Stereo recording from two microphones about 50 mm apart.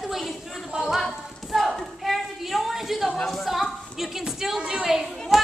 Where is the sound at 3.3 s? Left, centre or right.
Centre.